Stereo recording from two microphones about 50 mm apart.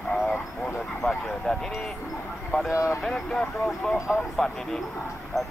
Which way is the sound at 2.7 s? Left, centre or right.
Left.